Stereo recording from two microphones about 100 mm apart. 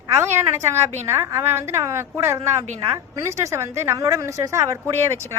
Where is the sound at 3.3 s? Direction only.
30° right (ahead or behind).